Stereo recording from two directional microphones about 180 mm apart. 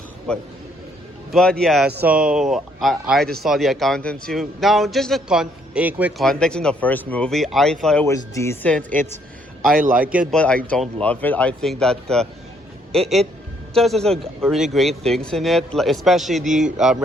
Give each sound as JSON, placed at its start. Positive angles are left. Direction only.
{"t": 1.3, "sound": "a man's voice", "side_deg": 5}
{"t": 8.0, "sound": "speech", "side_deg": 15}
{"t": 8.9, "sound": "a man's voice", "side_deg": -45}
{"t": 10.3, "sound": "a man's voice", "side_deg": 5}